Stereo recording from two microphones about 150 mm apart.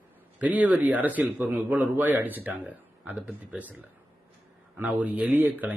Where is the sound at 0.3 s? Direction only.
10° right (ahead or behind).